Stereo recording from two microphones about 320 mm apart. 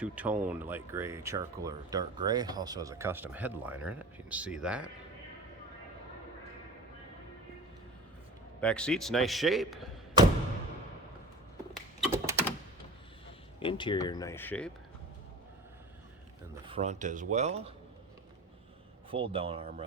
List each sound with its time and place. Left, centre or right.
0.0 s speech: centre
8.6 s speech: centre
11.9 s typing: centre
13.6 s speech: centre
16.6 s speech: centre
19.1 s speech: centre